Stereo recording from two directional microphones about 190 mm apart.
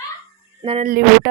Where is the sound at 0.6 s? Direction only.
30° right (ahead or behind).